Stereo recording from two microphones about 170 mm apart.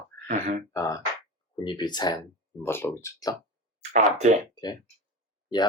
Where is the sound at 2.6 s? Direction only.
15° left (ahead or behind).